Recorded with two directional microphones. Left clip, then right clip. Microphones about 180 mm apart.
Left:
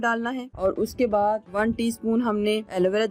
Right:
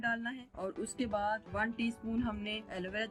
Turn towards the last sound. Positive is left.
turn(degrees=60)  # may be behind; listen again after turning